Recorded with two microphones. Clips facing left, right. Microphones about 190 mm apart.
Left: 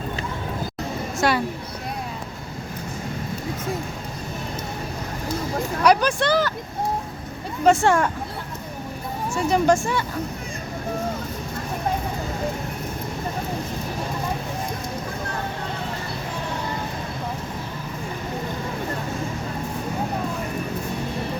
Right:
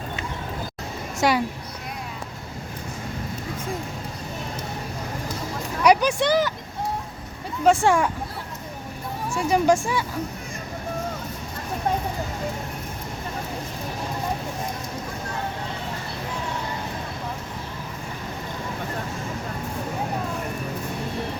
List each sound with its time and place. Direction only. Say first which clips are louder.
1.2 s speech: even; 15° right (ahead or behind)
5.9 s speech: right 1 dB; 15° right (ahead or behind)
7.6 s speech: left 1 dB; 10° right (ahead or behind)
9.3 s speech: left 1 dB; 10° right (ahead or behind)